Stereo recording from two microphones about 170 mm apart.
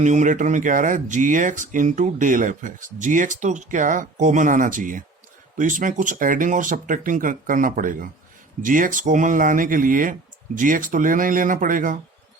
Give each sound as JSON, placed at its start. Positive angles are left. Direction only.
{"t": 0.0, "sound": "speech", "side_deg": -45}